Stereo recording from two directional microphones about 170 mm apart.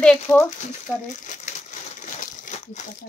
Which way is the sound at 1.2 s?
50° left (ahead or behind).